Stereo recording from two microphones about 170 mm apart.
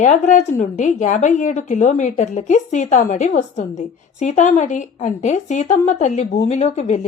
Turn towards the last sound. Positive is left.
turn(degrees=40)  # may be behind; listen again after turning